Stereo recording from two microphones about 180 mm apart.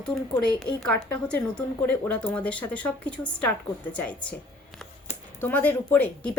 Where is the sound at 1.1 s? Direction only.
5° left (ahead or behind).